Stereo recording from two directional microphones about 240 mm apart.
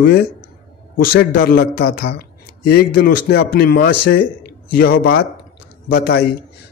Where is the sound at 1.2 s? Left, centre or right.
Left.